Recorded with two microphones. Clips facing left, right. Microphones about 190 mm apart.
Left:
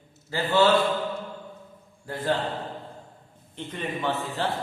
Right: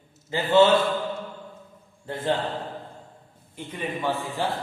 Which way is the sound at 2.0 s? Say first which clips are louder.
Right 1 dB; 25° right (ahead or behind).